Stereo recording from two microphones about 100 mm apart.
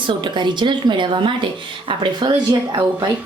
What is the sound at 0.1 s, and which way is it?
A woman's voice, 50° right (ahead or behind).